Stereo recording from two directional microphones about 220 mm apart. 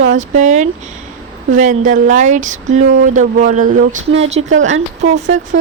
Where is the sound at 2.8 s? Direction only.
60° right (ahead or behind).